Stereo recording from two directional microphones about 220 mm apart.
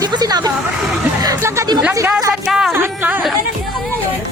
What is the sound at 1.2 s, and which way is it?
Music, 15° right (ahead or behind).